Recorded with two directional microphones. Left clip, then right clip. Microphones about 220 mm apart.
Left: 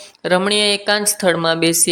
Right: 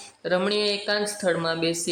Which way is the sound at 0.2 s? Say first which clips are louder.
Left 8 dB; 20° left (ahead or behind).